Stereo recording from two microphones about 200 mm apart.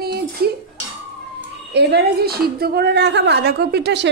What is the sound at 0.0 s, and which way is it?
Dishes, 50° right (ahead or behind).